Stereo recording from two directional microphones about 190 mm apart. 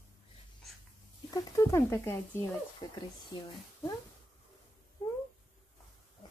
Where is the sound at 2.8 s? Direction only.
20° left (ahead or behind).